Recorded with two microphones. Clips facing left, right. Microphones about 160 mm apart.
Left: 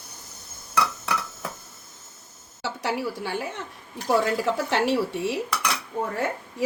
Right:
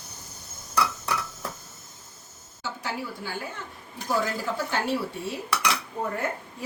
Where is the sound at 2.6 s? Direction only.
70° left (ahead or behind).